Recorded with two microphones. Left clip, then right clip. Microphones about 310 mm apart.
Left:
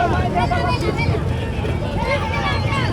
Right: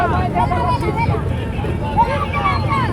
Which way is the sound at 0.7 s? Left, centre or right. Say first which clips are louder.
Right 3 dB; centre.